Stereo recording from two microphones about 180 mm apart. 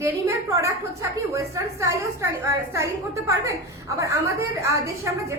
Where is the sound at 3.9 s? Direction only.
15° right (ahead or behind).